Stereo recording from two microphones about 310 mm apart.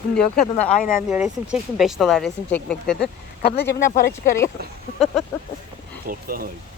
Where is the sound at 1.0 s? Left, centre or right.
Centre.